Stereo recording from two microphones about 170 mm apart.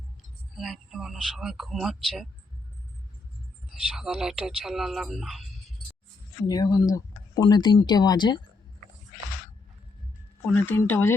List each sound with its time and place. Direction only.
0.5 s speech: centre (ahead or behind)
3.8 s speech: 5° right (ahead or behind)
6.5 s speech: 20° left (ahead or behind)
10.4 s speech: 10° left (ahead or behind)